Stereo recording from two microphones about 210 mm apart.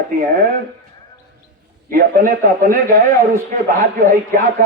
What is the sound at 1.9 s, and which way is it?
A man's voice, 40° right (ahead or behind).